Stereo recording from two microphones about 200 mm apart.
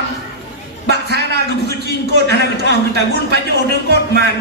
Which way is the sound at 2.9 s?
55° right (ahead or behind).